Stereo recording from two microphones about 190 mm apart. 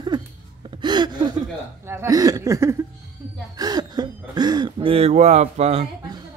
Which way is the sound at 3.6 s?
20° right (ahead or behind).